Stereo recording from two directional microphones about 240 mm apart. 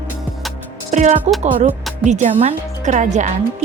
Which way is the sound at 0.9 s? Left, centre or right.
Right.